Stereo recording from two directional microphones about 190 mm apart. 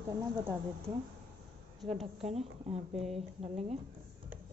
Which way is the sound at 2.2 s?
35° right (ahead or behind).